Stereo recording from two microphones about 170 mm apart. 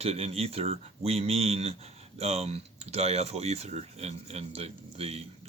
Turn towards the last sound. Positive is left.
turn(degrees=-35)  # may be behind; listen again after turning